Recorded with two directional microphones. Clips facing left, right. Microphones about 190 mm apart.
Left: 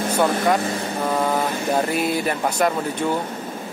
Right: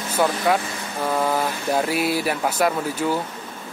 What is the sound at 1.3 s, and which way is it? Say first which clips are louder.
A man's voice: left 1 dB; 5° right (ahead or behind).